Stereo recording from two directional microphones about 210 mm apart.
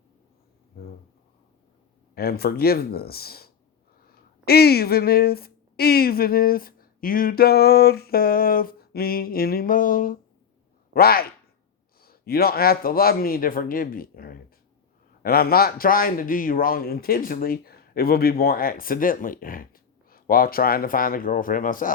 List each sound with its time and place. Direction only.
2.1 s a man's voice: 45° left (ahead or behind)